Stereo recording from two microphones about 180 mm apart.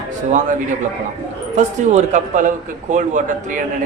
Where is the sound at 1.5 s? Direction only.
40° right (ahead or behind).